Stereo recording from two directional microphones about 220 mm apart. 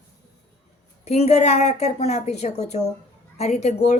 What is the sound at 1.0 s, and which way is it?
A woman's voice, 30° left (ahead or behind).